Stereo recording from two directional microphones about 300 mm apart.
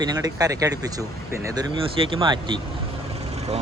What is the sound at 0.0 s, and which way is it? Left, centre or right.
Speech, centre.